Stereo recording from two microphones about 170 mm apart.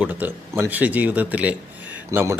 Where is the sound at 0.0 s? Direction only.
10° right (ahead or behind).